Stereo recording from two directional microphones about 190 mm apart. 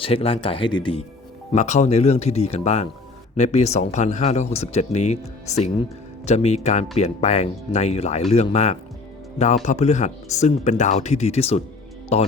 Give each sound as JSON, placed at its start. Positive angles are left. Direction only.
{"t": 0.0, "sound": "speech", "side_deg": 30}
{"t": 1.5, "sound": "speech", "side_deg": 35}